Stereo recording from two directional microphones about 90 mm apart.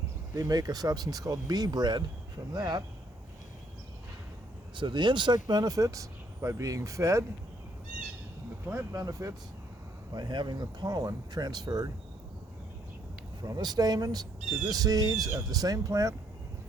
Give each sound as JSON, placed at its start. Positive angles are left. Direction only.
{"t": 0.3, "sound": "speech", "side_deg": -40}
{"t": 4.7, "sound": "speech", "side_deg": -60}
{"t": 8.6, "sound": "speech", "side_deg": -30}
{"t": 10.2, "sound": "speech", "side_deg": -55}
{"t": 13.4, "sound": "speech", "side_deg": -50}